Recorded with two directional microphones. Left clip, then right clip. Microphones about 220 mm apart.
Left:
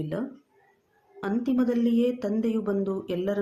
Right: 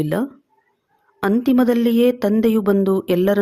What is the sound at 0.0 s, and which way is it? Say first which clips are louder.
Speech: right 11 dB; 40° right (ahead or behind).